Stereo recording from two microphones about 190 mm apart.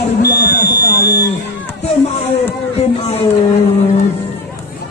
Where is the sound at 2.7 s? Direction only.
35° left (ahead or behind).